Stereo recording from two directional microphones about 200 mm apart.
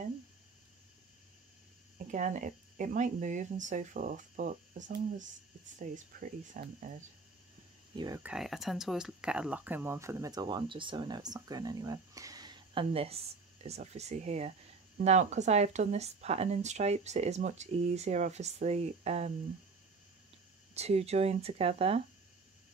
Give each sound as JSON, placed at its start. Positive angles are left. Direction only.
{"t": 2.0, "sound": "speech", "side_deg": -40}
{"t": 7.9, "sound": "speech", "side_deg": -20}
{"t": 8.2, "sound": "speech", "side_deg": -5}
{"t": 20.7, "sound": "speech", "side_deg": -30}